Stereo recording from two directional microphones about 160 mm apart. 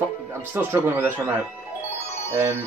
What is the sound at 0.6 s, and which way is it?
Speech, 15° right (ahead or behind).